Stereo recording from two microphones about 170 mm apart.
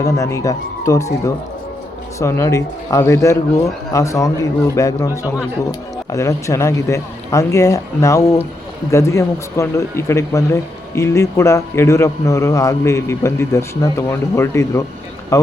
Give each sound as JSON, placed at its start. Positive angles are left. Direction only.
{"t": 0.0, "sound": "speech", "side_deg": 20}